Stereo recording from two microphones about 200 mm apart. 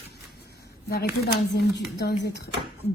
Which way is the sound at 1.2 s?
55° left (ahead or behind).